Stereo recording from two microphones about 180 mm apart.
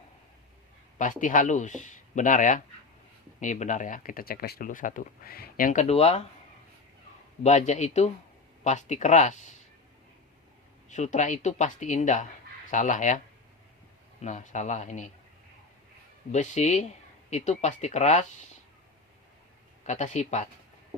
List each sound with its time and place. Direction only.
0.9 s speech: 45° left (ahead or behind)
7.4 s speech: 40° left (ahead or behind)
10.8 s speech: 40° left (ahead or behind)
16.3 s speech: 40° left (ahead or behind)
19.8 s speech: 40° left (ahead or behind)